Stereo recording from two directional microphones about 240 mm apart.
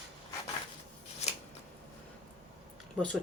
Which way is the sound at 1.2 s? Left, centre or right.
Left.